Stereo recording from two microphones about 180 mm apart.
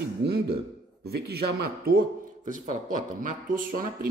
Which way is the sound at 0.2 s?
65° right (ahead or behind).